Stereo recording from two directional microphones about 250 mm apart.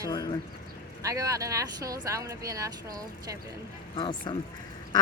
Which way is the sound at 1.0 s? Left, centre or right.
Centre.